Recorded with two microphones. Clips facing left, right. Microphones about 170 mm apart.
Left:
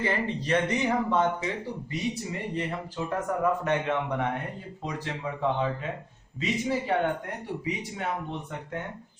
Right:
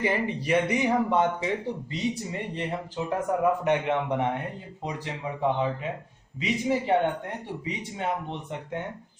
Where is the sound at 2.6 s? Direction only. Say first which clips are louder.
Right 1 dB; 20° right (ahead or behind).